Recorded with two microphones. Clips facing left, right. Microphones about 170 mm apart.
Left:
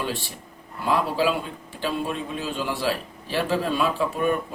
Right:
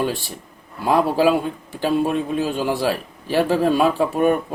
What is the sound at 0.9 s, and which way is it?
A man's voice, 45° right (ahead or behind).